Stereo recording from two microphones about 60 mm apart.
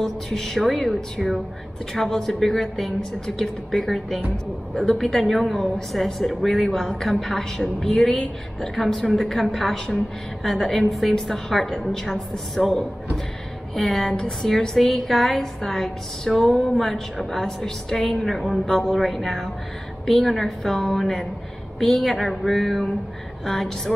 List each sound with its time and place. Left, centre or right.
0.0 s a woman's voice: centre